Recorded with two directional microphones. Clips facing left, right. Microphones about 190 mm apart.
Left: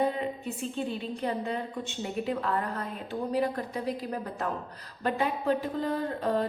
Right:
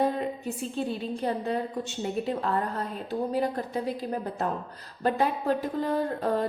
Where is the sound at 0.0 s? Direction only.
40° right (ahead or behind).